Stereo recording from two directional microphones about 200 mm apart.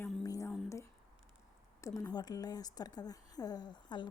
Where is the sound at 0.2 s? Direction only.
15° left (ahead or behind).